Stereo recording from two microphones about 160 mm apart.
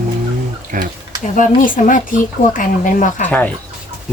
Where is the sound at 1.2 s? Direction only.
55° left (ahead or behind).